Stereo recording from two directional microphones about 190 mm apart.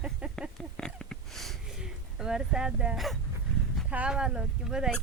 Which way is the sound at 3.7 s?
5° right (ahead or behind).